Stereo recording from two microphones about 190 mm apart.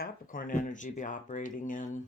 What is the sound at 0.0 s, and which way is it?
Speech, 45° left (ahead or behind).